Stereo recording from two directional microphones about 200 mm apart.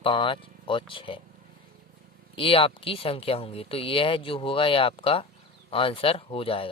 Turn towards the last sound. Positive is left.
turn(degrees=25)  # may be behind; listen again after turning